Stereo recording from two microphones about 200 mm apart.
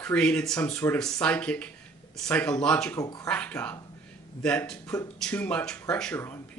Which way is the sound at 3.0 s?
15° left (ahead or behind).